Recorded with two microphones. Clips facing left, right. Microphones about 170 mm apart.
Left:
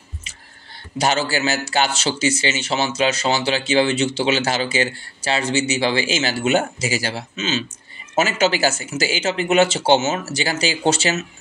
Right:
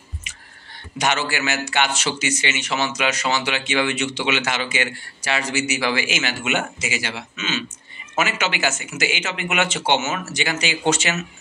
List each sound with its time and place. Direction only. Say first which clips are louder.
0.9 s a man's voice: left 3 dB; 30° left (ahead or behind)